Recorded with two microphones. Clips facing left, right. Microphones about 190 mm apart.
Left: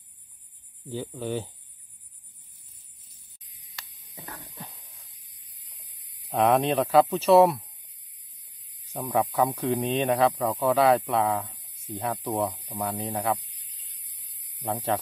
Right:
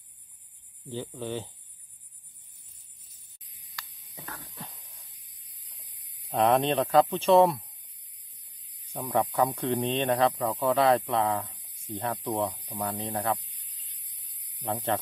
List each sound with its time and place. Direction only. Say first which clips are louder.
0.8 s speech: left 3 dB; 10° left (ahead or behind)
3.8 s a sound: right 1 dB; 25° left (ahead or behind)
4.1 s a sound: left 1 dB; 10° left (ahead or behind)
6.3 s speech: left 1 dB; centre (ahead or behind)
8.9 s speech: left 2 dB; centre (ahead or behind)
14.6 s speech: left 2 dB; 10° left (ahead or behind)